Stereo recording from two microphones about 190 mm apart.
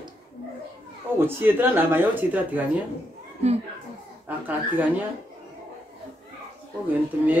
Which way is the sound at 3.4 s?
35° right (ahead or behind).